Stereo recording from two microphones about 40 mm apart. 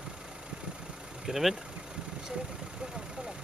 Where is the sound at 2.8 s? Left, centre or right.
Centre.